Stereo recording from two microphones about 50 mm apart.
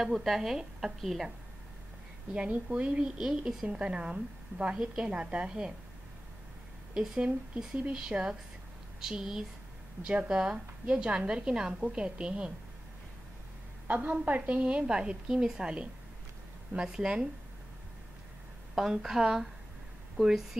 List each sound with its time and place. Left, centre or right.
0.1 s a woman's voice: centre
2.5 s a woman's voice: right
3.2 s a woman's voice: centre
3.6 s a woman's voice: centre
7.5 s a woman's voice: centre
13.8 s a woman's voice: right; by 17.3 s centre
18.8 s a woman's voice: centre